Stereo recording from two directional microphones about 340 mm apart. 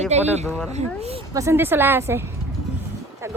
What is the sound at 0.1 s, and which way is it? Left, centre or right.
A woman's voice, centre.